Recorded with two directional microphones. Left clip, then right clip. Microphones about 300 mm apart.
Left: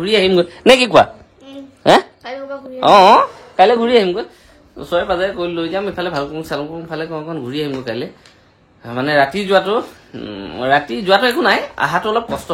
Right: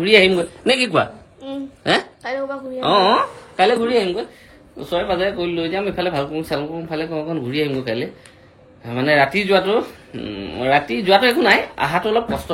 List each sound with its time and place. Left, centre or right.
0.0 s speech: centre
0.4 s speech: centre